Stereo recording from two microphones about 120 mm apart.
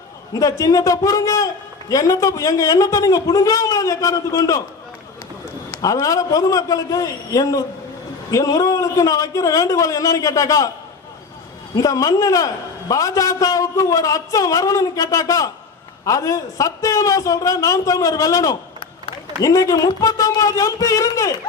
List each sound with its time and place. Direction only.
0.3 s a man's voice: 30° left (ahead or behind)
5.7 s a man's voice: 25° left (ahead or behind)
11.7 s a man's voice: 30° left (ahead or behind)